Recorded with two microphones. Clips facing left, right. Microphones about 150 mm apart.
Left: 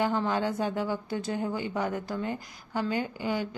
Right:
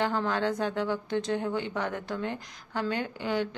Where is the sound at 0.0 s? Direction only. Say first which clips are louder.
Left 1 dB; 10° left (ahead or behind).